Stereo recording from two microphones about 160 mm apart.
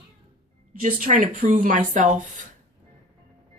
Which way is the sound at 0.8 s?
55° right (ahead or behind).